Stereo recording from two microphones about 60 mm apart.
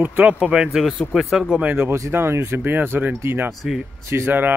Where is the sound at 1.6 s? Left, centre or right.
Right.